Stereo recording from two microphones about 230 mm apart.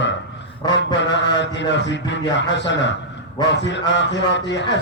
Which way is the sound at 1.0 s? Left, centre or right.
Left.